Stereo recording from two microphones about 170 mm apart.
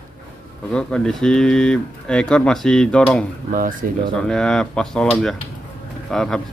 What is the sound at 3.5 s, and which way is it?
Speech, 55° right (ahead or behind).